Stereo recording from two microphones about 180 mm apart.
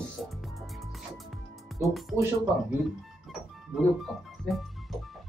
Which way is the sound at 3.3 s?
Centre (ahead or behind).